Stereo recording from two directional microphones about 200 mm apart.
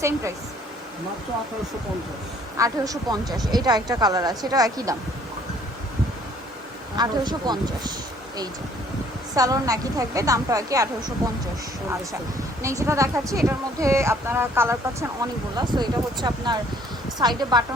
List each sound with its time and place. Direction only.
2.6 s a woman's voice: 15° right (ahead or behind)
3.2 s speech: centre (ahead or behind)
3.5 s speech: 20° right (ahead or behind)
6.9 s speech: 20° right (ahead or behind)
9.3 s a woman's voice: 20° right (ahead or behind)
12.6 s a woman's voice: 15° right (ahead or behind)